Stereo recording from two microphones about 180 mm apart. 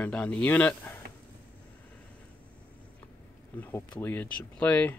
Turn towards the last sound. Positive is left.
turn(degrees=10)  # may be behind; listen again after turning